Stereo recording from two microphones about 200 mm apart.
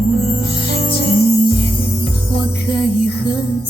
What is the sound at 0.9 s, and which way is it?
Music, 50° left (ahead or behind).